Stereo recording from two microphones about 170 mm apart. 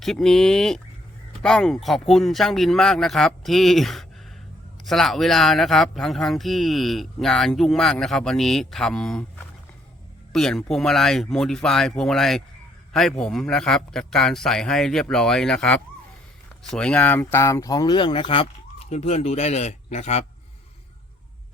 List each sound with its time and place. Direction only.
0.0 s speech: centre (ahead or behind)
10.3 s speech: 5° left (ahead or behind); by 18.4 s 30° left (ahead or behind)
18.9 s speech: 40° left (ahead or behind)